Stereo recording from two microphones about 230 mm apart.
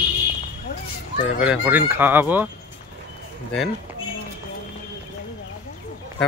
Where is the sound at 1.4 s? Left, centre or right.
Centre.